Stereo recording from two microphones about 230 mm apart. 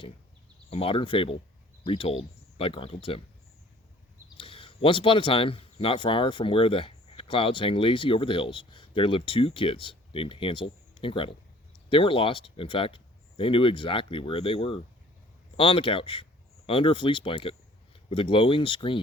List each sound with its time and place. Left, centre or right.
0.7 s speech: left
4.4 s speech: left